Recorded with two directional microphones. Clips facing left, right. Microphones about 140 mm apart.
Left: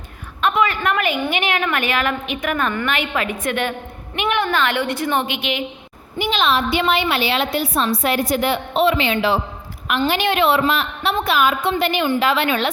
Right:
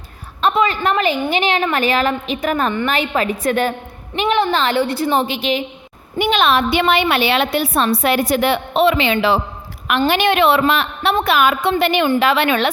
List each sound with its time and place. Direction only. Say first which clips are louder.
0.4 s a woman's voice: right 2 dB; 30° right (ahead or behind)
6.1 s a woman's voice: right 4 dB; 60° right (ahead or behind); by 9.4 s 85° right
10.1 s a woman's voice: right 3 dB; 65° right (ahead or behind)